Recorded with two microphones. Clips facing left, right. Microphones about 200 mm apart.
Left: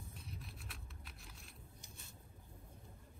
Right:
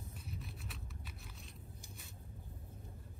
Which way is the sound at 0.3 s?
Centre (ahead or behind).